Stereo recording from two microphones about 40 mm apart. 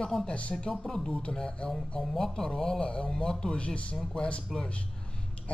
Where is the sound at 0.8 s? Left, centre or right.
Centre.